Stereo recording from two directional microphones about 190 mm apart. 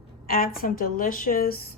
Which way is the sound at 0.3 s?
50° left (ahead or behind).